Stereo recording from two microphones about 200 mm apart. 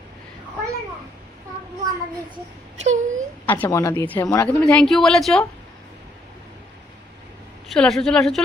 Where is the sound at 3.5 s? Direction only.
10° left (ahead or behind).